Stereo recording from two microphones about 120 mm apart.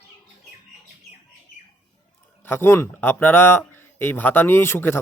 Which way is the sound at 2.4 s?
20° left (ahead or behind).